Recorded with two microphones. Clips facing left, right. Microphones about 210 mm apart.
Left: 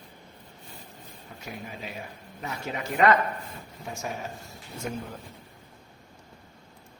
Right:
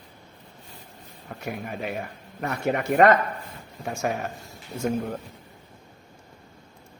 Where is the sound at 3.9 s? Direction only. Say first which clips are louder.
Right 7 dB; 60° right (ahead or behind).